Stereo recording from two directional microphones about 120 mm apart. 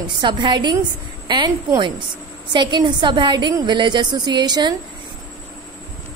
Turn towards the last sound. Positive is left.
turn(degrees=-35)  # may be behind; listen again after turning